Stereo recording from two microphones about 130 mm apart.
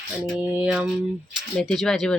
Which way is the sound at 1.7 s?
5° left (ahead or behind).